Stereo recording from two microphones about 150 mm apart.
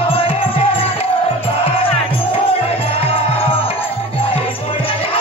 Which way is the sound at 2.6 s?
40° left (ahead or behind).